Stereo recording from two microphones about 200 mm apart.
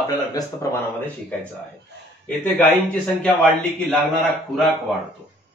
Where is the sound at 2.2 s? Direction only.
5° left (ahead or behind).